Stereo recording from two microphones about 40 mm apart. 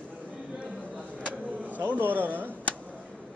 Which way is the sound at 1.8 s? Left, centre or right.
Right.